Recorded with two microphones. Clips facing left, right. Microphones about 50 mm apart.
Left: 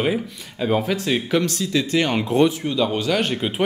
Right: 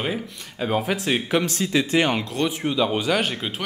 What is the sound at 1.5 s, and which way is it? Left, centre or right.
Speech, right.